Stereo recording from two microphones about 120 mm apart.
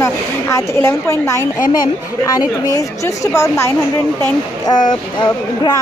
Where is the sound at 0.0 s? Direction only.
25° left (ahead or behind).